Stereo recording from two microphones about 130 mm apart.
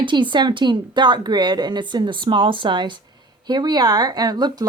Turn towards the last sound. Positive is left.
turn(degrees=-30)  # may be behind; listen again after turning